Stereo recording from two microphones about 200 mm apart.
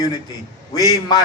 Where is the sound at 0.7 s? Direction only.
20° left (ahead or behind).